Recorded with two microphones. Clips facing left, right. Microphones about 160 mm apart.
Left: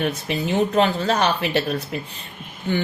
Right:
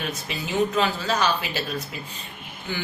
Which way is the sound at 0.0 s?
55° left (ahead or behind).